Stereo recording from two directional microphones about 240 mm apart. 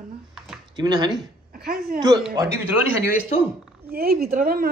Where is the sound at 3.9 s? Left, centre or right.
Right.